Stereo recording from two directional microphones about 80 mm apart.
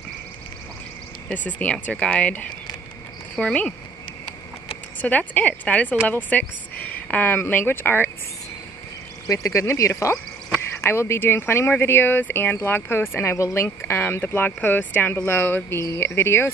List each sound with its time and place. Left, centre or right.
1.3 s speech: centre
5.0 s speech: centre
9.3 s speech: left